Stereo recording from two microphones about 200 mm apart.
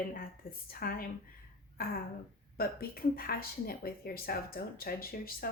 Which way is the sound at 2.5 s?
50° left (ahead or behind).